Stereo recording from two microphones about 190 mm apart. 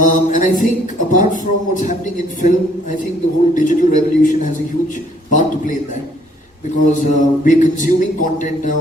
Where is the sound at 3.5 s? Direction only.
45° left (ahead or behind).